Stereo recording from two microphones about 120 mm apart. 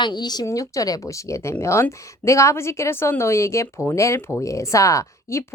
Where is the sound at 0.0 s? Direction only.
35° left (ahead or behind).